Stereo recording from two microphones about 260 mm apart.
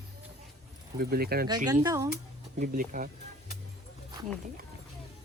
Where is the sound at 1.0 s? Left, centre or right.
Right.